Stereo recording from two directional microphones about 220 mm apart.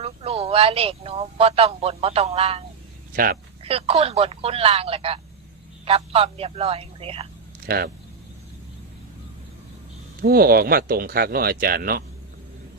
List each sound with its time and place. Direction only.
0.0 s speech: 25° right (ahead or behind)
10.2 s speech: 45° right (ahead or behind)